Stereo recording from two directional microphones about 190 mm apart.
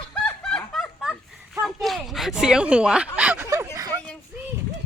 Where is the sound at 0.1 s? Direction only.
5° left (ahead or behind).